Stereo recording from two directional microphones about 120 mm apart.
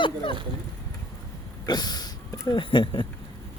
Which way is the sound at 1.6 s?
35° left (ahead or behind).